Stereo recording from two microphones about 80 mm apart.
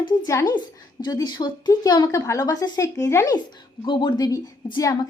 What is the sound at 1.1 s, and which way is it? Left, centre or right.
Speech, left.